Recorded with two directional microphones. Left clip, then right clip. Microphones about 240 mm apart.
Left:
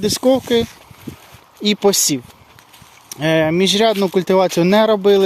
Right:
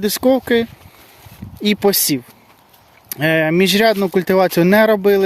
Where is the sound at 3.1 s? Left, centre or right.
Right.